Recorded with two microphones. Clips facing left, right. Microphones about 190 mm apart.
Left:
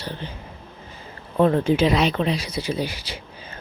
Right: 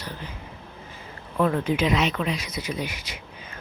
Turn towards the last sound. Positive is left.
turn(degrees=30)  # may be behind; listen again after turning